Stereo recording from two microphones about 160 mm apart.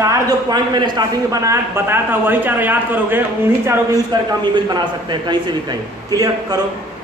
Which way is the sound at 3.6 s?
25° right (ahead or behind).